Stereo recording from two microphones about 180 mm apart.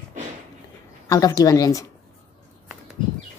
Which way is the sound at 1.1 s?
20° left (ahead or behind).